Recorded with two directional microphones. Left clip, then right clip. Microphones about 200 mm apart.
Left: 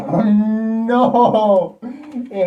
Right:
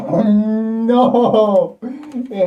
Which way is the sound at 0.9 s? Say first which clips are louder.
Right 1 dB; centre (ahead or behind).